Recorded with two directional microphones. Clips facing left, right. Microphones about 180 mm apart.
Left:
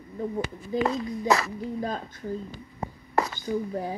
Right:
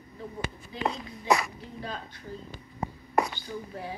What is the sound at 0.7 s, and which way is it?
A woman's voice, 45° left (ahead or behind).